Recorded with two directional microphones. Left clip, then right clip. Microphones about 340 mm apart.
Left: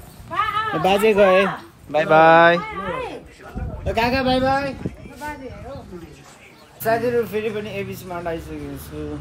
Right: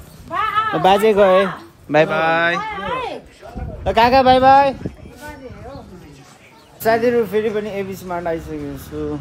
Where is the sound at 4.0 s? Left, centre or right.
Centre.